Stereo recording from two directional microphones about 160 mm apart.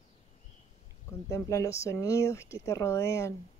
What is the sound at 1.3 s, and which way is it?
Speech, 20° left (ahead or behind).